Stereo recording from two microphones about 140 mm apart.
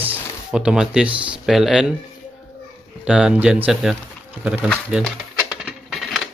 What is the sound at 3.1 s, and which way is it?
Speech, 5° right (ahead or behind).